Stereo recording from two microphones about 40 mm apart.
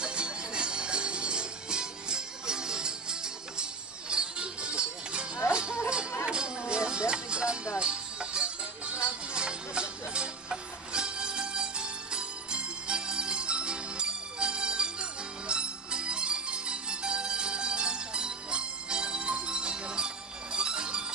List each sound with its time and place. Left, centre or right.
0.0 s music: right